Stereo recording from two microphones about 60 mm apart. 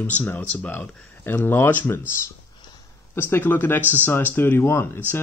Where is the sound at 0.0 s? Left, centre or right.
Left.